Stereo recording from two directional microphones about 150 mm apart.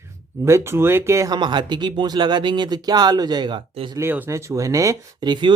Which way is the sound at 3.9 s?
15° right (ahead or behind).